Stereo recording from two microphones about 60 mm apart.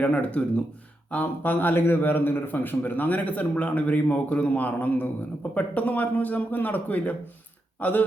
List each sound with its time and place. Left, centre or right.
0.0 s a man's voice: left